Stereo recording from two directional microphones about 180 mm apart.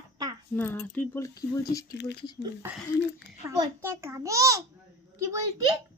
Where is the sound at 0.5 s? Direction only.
10° left (ahead or behind).